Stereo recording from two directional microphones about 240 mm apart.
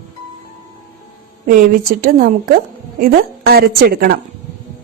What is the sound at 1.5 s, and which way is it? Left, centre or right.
A woman's voice, right.